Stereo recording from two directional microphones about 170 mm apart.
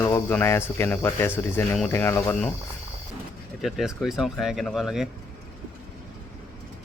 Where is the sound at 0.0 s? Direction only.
15° left (ahead or behind).